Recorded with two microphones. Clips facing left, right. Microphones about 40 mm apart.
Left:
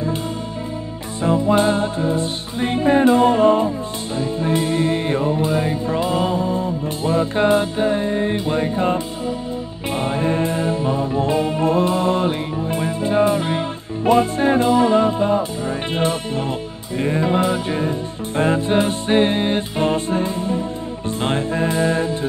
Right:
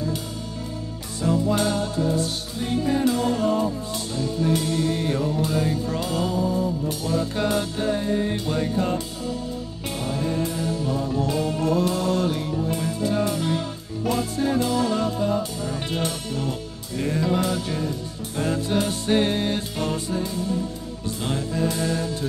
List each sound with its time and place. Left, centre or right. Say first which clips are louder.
1.2 s music: left 6 dB; left